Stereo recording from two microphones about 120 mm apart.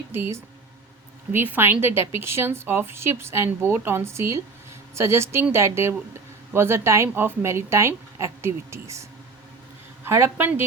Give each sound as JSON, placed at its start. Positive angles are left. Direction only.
{"t": 0.1, "sound": "a woman's voice", "side_deg": -20}